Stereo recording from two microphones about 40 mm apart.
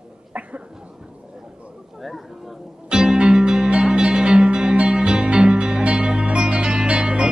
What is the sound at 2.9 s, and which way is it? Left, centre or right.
Music, centre.